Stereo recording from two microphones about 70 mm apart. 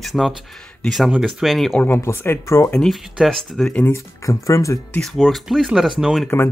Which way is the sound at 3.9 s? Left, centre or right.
Left.